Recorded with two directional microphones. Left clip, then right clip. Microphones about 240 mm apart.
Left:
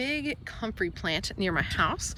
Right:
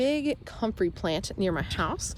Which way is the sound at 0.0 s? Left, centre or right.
Centre.